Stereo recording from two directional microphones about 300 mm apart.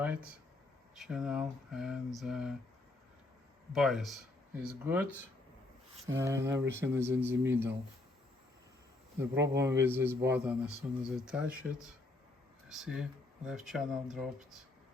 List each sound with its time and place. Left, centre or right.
0.0 s speech: centre
3.7 s speech: centre
6.1 s speech: centre
9.3 s speech: right
9.6 s speech: centre